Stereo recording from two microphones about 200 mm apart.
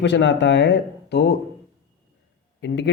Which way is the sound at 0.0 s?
60° left (ahead or behind).